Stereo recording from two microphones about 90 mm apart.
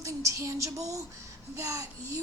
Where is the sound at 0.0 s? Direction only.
35° right (ahead or behind).